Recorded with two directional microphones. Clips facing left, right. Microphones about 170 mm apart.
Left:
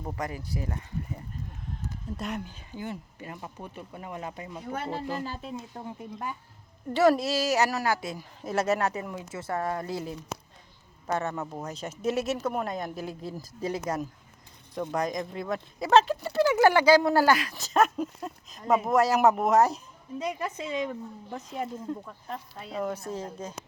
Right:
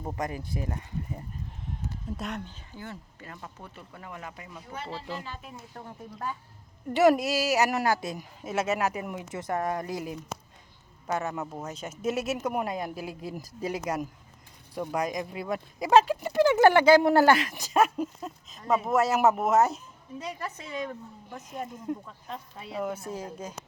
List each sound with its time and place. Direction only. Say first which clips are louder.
0.0 s speech: right 1 dB; 20° right (ahead or behind)
2.1 s speech: left 4 dB; centre (ahead or behind); by 4.6 s 25° left (ahead or behind)
4.7 s speech: left 5 dB; 50° left (ahead or behind)
5.1 s speech: left 5 dB; 40° left (ahead or behind)
5.5 s speech: left 4 dB; 15° left (ahead or behind)
6.9 s speech: right 1 dB; 15° right (ahead or behind)
7.7 s speech: right 2 dB; 25° right (ahead or behind)
8.4 s speech: left 2 dB; 5° right (ahead or behind)
9.0 s speech: right 1 dB; 20° right (ahead or behind)
11.8 s speech: left 1 dB; 30° left (ahead or behind)
12.1 s speech: even; 10° right (ahead or behind); by 17.6 s 25° right (ahead or behind)
17.6 s speech: even; 10° right (ahead or behind)
20.1 s speech: left 5 dB; 15° left (ahead or behind)
22.0 s speech: left 2 dB; centre (ahead or behind)